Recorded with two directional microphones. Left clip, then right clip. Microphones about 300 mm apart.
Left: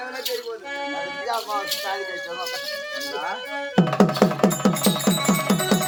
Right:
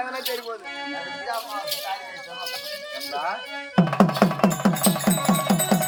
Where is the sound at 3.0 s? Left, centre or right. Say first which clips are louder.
Right 3 dB; centre.